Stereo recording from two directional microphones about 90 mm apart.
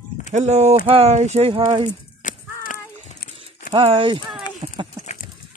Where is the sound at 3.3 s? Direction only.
85° right.